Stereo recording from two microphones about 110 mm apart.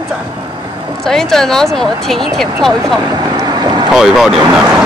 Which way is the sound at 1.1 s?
5° left (ahead or behind).